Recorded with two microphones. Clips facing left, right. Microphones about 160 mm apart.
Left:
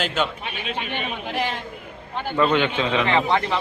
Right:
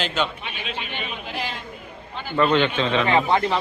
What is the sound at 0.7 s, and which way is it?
Chatter, 50° left (ahead or behind).